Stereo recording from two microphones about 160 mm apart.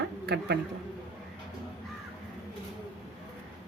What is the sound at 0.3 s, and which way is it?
Speech, 90° right.